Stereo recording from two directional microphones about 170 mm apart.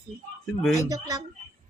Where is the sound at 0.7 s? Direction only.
20° right (ahead or behind).